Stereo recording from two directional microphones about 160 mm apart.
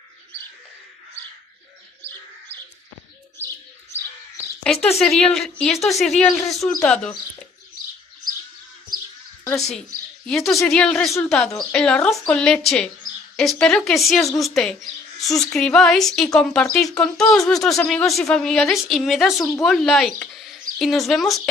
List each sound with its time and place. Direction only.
4.9 s speech: 5° left (ahead or behind)
9.8 s speech: 5° left (ahead or behind)
19.3 s a woman's voice: 20° left (ahead or behind)
19.6 s speech: centre (ahead or behind)